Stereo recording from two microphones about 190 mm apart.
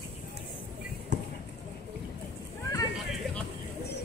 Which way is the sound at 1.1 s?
65° right (ahead or behind).